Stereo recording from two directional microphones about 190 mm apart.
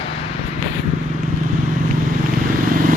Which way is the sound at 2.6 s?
45° right (ahead or behind).